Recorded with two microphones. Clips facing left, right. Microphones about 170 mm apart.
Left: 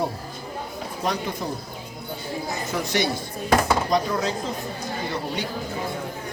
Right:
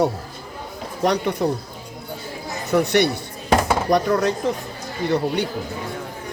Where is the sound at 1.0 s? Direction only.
70° right (ahead or behind).